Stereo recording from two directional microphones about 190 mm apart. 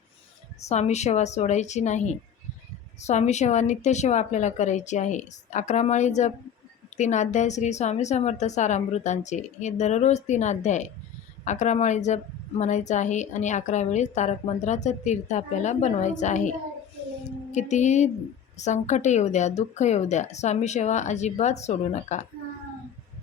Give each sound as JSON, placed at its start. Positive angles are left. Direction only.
{"t": 0.6, "sound": "a woman's voice", "side_deg": 35}